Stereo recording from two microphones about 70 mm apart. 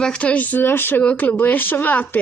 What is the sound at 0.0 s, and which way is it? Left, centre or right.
Speech, centre.